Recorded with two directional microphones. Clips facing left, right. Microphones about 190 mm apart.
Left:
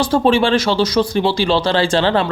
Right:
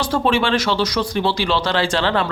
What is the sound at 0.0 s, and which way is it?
Speech, 30° left (ahead or behind).